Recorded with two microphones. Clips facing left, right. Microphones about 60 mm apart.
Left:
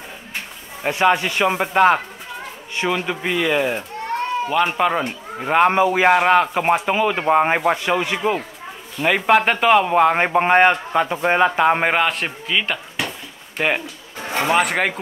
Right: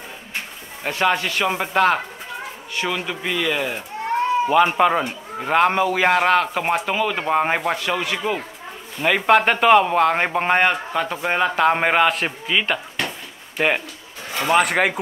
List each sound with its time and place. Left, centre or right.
0.8 s speech: centre
4.1 s speech: centre
9.0 s speech: centre
14.2 s a sound: left
14.5 s speech: centre